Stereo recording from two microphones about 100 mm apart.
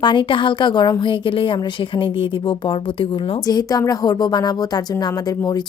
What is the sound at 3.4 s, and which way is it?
Speech, 40° left (ahead or behind).